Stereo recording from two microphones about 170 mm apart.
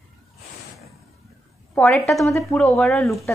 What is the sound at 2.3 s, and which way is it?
Speech, 15° left (ahead or behind).